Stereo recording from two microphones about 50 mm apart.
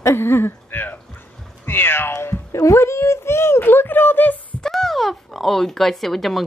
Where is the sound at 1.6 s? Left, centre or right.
Left.